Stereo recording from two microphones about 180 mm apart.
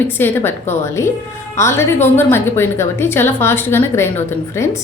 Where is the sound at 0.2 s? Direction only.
10° left (ahead or behind).